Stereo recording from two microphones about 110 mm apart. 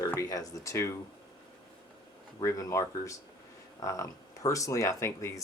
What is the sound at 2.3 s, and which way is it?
Speech, 30° left (ahead or behind).